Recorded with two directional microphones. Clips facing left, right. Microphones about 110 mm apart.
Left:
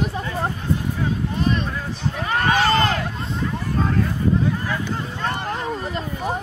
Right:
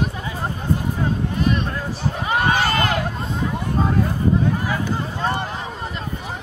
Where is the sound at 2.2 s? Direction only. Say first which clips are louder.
Even; 15° right (ahead or behind).